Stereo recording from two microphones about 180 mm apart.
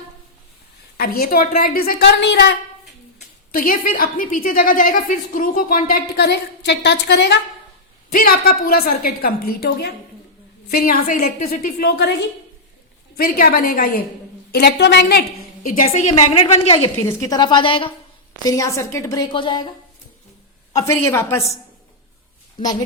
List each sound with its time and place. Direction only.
0.9 s a woman's voice: 55° left (ahead or behind)
3.5 s a woman's voice: 50° left (ahead or behind); by 7.3 s 70° left (ahead or behind)
8.1 s a woman's voice: 55° left (ahead or behind)
13.1 s a woman's voice: 55° left (ahead or behind)
15.6 s a woman's voice: 50° left (ahead or behind)
16.3 s a woman's voice: 35° left (ahead or behind)
17.0 s a woman's voice: 15° left (ahead or behind)
18.4 s a woman's voice: 20° left (ahead or behind)
20.7 s a woman's voice: 15° left (ahead or behind)